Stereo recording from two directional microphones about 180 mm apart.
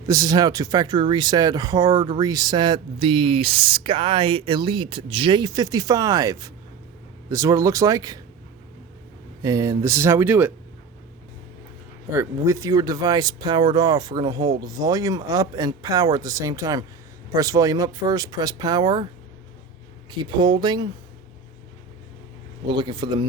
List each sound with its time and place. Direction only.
0.1 s speech: 20° right (ahead or behind)
9.4 s speech: 20° right (ahead or behind)
12.1 s speech: 15° right (ahead or behind)
20.1 s speech: 25° right (ahead or behind)
22.6 s speech: 25° right (ahead or behind)